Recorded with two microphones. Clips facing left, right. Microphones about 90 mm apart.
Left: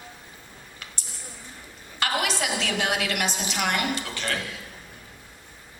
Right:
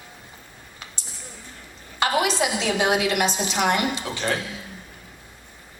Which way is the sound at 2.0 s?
20° right (ahead or behind).